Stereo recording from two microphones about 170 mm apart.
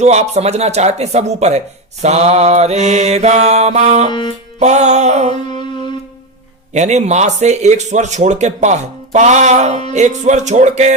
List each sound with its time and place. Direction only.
0.0 s speech: 40° right (ahead or behind)
4.1 s music: 25° left (ahead or behind)
4.6 s speech: 45° right (ahead or behind)
6.7 s speech: 45° right (ahead or behind)